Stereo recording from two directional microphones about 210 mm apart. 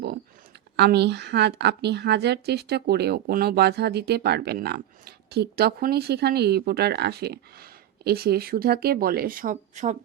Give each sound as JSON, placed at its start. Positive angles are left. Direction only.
{"t": 0.8, "sound": "a woman's voice", "side_deg": -50}